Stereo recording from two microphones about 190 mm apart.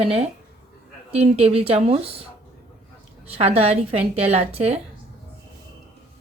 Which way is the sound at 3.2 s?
30° right (ahead or behind).